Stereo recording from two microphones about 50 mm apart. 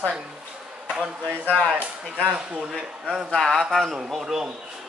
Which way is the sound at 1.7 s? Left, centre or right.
Right.